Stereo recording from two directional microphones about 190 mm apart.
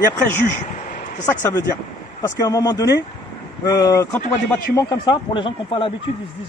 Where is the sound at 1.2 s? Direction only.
15° left (ahead or behind).